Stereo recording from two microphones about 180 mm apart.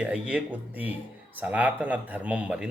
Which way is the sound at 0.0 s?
5° right (ahead or behind).